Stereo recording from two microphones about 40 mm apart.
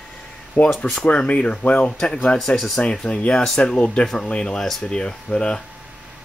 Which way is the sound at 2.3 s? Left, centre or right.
Centre.